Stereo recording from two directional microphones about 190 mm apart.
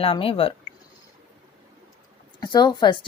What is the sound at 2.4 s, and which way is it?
Speech, 20° left (ahead or behind).